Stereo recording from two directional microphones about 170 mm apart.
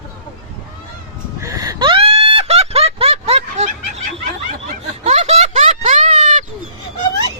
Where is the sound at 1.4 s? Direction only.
20° right (ahead or behind); by 4.0 s 35° right (ahead or behind).